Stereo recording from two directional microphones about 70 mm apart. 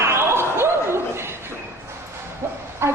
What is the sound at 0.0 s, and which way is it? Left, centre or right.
Chuckle, right.